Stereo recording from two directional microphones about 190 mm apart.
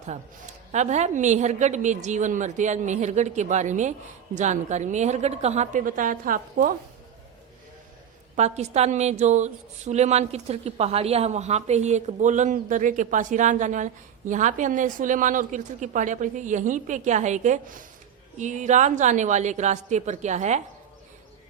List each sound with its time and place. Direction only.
0.1 s a woman's voice: 40° right (ahead or behind)
8.4 s a woman's voice: 35° right (ahead or behind)